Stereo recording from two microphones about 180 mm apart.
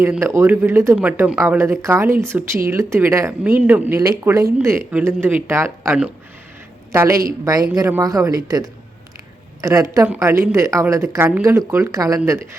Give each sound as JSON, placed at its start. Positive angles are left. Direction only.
{"t": 0.0, "sound": "speech", "side_deg": -15}